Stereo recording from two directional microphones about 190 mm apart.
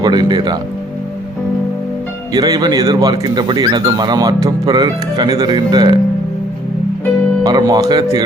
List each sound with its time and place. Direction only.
0.0 s speech: 25° right (ahead or behind)
2.3 s speech: 20° right (ahead or behind)
7.4 s speech: 20° right (ahead or behind)